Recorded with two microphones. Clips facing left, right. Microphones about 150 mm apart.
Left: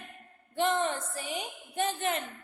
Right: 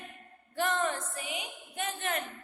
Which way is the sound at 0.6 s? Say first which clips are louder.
Left 2 dB; 25° left (ahead or behind).